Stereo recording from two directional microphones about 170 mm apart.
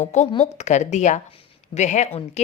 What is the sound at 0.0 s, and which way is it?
Speech, 45° left (ahead or behind).